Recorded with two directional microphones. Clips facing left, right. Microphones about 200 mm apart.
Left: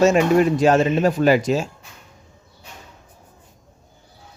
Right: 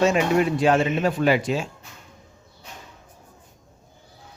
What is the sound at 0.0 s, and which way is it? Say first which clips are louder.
Speech: left 4 dB; 45° left (ahead or behind).